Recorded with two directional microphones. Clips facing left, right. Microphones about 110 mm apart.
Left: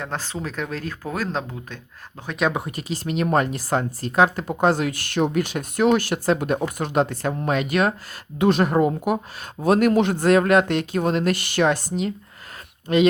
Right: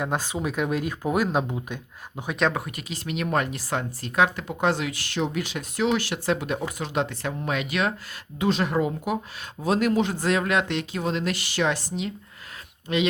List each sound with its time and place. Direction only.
0.0 s speech: 10° right (ahead or behind)
2.5 s speech: 25° left (ahead or behind); by 13.0 s 45° left (ahead or behind)